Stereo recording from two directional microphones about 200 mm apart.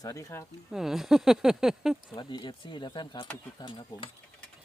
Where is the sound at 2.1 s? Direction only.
25° left (ahead or behind).